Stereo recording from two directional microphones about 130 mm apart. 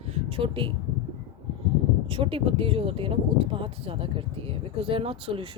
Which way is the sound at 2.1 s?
45° right (ahead or behind).